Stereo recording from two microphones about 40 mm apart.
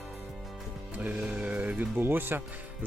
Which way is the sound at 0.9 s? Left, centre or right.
Right.